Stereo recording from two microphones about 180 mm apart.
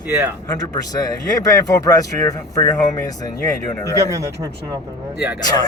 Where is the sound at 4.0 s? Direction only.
15° right (ahead or behind).